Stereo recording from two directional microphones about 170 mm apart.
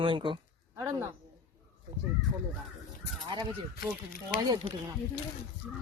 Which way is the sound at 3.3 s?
25° right (ahead or behind).